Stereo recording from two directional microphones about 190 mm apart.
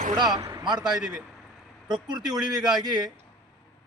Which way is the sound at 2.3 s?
20° right (ahead or behind).